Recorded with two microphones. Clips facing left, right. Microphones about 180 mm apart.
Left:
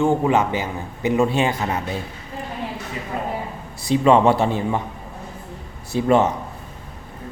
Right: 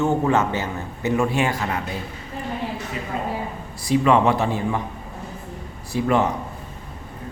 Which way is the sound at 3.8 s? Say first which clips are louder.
Left 2 dB; 25° left (ahead or behind).